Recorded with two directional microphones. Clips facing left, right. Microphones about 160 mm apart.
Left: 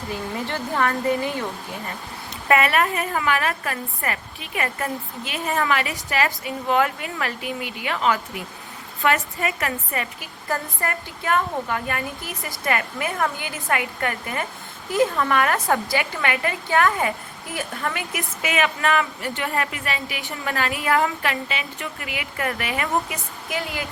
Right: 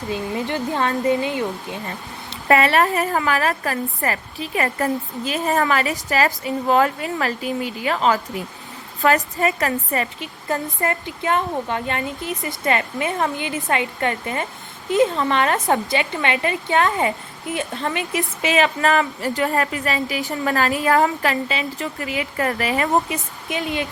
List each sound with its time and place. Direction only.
0.1 s a woman's voice: 20° right (ahead or behind)
2.3 s a woman's voice: 30° right (ahead or behind)
10.5 s a woman's voice: 20° right (ahead or behind)